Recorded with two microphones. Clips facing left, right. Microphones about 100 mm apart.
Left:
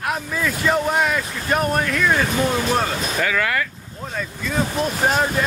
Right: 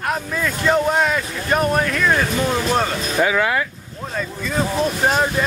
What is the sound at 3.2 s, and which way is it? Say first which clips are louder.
Speech: right 5 dB; 20° right (ahead or behind).